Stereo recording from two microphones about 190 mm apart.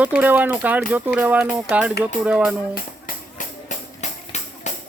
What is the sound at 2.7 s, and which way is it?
Tambourine, 45° left (ahead or behind).